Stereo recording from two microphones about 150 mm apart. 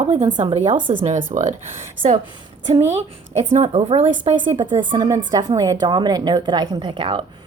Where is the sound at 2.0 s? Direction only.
35° right (ahead or behind).